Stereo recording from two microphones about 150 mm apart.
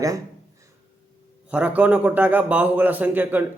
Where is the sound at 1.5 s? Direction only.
10° right (ahead or behind).